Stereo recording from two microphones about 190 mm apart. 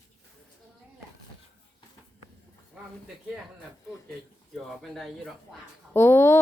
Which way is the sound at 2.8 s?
5° right (ahead or behind).